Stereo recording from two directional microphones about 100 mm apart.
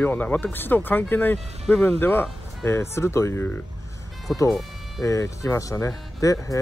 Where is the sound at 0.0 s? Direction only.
15° left (ahead or behind).